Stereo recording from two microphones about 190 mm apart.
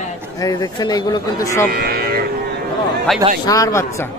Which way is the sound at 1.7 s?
55° right (ahead or behind).